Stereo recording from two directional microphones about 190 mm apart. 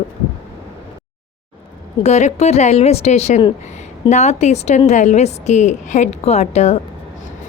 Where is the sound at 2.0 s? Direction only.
35° left (ahead or behind).